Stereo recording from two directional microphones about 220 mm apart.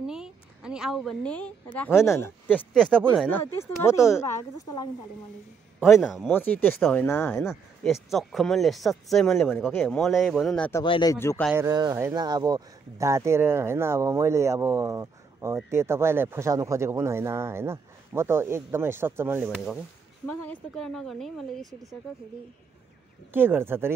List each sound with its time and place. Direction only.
0.0 s a sound: 5° right (ahead or behind)
1.8 s speech: 10° left (ahead or behind)
3.0 s speech: 10° right (ahead or behind)
3.3 s speech: 10° left (ahead or behind)
5.8 s speech: centre (ahead or behind)
7.4 s speech: centre (ahead or behind)
10.8 s speech: 20° left (ahead or behind)
11.5 s speech: 15° right (ahead or behind)
20.2 s speech: 5° left (ahead or behind)
23.3 s speech: 10° right (ahead or behind)